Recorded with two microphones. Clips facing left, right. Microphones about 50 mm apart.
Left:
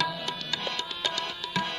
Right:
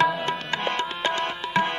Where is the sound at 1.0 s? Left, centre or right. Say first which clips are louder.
Right 7 dB; right.